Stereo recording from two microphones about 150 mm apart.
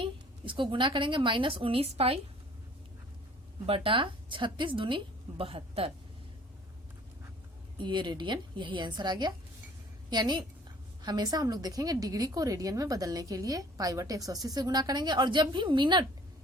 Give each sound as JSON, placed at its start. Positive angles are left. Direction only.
{"t": 0.0, "sound": "a woman's voice", "side_deg": -35}
{"t": 3.7, "sound": "a woman's voice", "side_deg": -35}
{"t": 7.8, "sound": "a woman's voice", "side_deg": -30}